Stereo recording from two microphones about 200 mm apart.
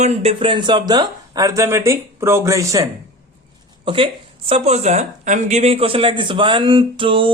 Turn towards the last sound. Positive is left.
turn(degrees=-25)  # may be behind; listen again after turning